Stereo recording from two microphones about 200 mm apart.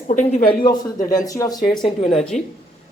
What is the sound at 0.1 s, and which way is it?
Speech, 35° left (ahead or behind).